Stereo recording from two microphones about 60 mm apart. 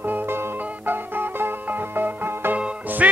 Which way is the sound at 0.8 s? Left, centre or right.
Right.